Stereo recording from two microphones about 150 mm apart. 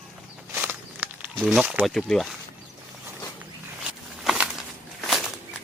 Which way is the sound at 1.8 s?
5° left (ahead or behind).